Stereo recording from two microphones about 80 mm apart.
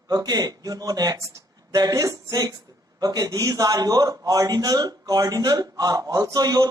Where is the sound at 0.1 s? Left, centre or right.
Right.